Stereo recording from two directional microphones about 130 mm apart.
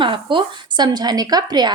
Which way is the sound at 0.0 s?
40° right (ahead or behind).